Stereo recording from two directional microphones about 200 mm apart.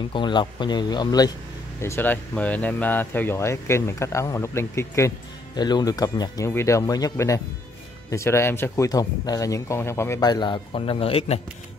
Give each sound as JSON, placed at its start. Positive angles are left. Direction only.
{"t": 0.1, "sound": "speech", "side_deg": 25}